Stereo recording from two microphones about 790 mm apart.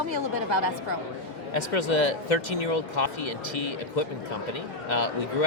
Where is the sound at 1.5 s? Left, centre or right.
Left.